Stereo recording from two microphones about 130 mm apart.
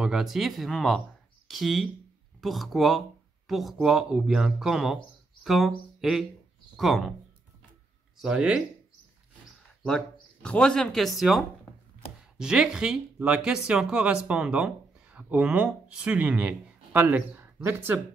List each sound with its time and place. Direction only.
0.0 s speech: 5° right (ahead or behind)
8.2 s speech: 5° right (ahead or behind)
10.4 s speech: 5° left (ahead or behind); by 18.0 s 15° right (ahead or behind)